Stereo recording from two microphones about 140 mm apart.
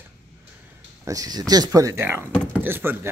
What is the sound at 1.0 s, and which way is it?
Speech, 25° right (ahead or behind).